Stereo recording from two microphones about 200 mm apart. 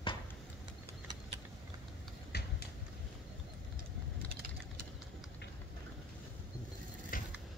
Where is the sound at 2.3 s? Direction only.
55° left (ahead or behind).